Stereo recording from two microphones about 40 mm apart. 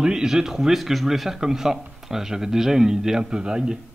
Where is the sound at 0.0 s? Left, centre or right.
Centre.